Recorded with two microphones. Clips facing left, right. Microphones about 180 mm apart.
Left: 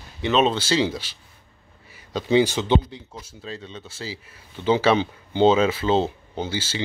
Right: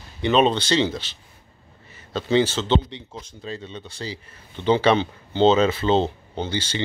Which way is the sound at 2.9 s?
Centre (ahead or behind).